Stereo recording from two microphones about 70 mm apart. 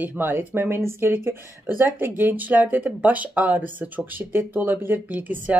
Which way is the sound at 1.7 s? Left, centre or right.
Right.